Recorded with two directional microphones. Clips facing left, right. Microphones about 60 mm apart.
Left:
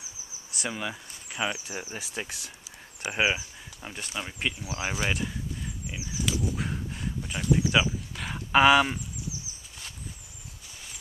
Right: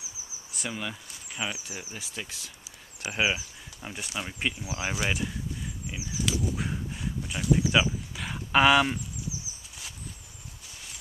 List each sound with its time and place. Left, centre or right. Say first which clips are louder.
0.6 s a sound: left 2 dB; centre
1.7 s speech: left 4 dB; left
2.2 s speech: left 3 dB; left
3.8 s speech: even; centre